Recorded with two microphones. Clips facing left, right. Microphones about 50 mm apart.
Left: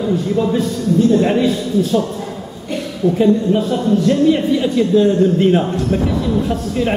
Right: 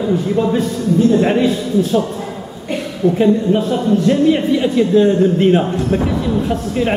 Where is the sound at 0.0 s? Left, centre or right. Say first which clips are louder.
Right 1 dB; centre.